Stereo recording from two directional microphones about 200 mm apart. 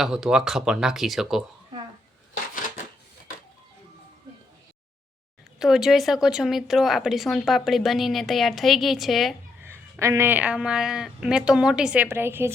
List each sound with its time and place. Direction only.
0.0 s speech: 5° right (ahead or behind)
2.3 s a sound: 40° left (ahead or behind)
5.5 s speech: centre (ahead or behind)
9.6 s speech: 15° right (ahead or behind)